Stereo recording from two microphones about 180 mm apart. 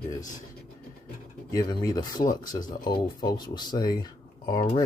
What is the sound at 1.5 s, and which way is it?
Speech, 20° left (ahead or behind).